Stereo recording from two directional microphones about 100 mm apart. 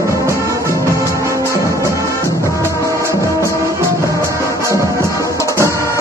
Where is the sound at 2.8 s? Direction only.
30° right (ahead or behind).